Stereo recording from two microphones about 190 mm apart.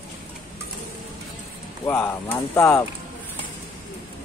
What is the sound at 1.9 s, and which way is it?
Speech, 10° left (ahead or behind).